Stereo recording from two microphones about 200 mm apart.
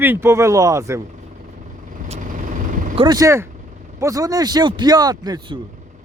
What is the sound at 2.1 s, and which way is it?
Vehicle, 40° right (ahead or behind).